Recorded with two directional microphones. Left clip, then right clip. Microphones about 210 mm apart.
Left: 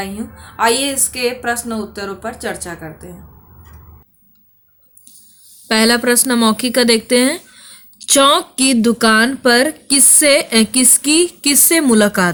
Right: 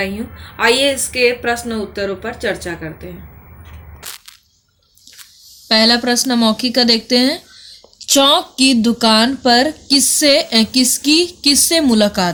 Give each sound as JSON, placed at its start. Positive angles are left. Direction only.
{"t": 0.0, "sound": "a woman's voice", "side_deg": 20}
{"t": 5.6, "sound": "speech", "side_deg": 50}